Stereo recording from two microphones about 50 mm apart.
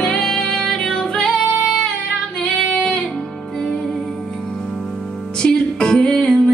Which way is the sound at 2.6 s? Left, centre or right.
Left.